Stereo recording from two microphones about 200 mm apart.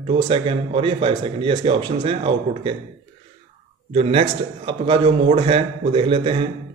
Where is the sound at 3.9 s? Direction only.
30° right (ahead or behind).